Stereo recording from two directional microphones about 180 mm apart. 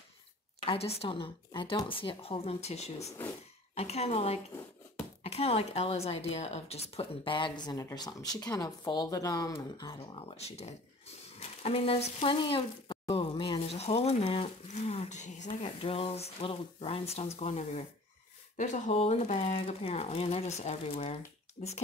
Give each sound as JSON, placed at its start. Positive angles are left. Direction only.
{"t": 0.7, "sound": "speech", "side_deg": 35}
{"t": 3.1, "sound": "speech", "side_deg": 15}
{"t": 3.7, "sound": "speech", "side_deg": 35}